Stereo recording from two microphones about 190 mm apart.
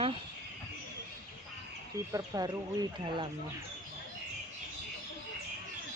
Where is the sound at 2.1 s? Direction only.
20° right (ahead or behind).